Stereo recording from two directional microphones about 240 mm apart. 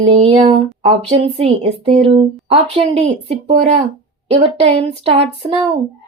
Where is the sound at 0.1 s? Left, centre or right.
Right.